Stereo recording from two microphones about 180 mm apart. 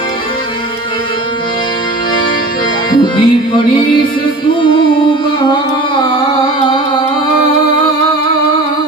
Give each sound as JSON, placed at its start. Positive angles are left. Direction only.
{"t": 3.0, "sound": "music", "side_deg": 25}